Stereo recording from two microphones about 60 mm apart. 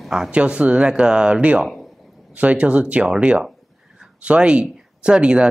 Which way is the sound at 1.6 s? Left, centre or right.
Centre.